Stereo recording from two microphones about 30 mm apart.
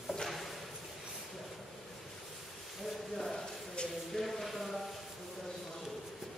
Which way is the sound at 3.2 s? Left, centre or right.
Centre.